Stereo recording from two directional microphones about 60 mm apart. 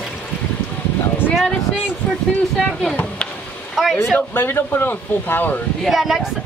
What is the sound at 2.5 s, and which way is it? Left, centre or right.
Speech, centre.